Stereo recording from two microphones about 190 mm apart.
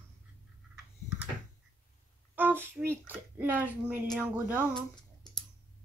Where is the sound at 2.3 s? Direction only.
10° right (ahead or behind).